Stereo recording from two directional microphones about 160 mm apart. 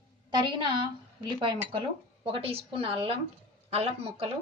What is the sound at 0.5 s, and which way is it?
A woman's voice, 30° right (ahead or behind).